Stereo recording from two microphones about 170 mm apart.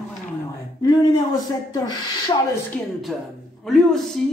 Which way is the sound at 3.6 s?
Centre (ahead or behind).